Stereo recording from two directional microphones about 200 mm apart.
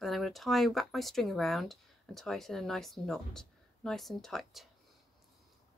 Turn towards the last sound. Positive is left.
turn(degrees=0)  # may be behind; listen again after turning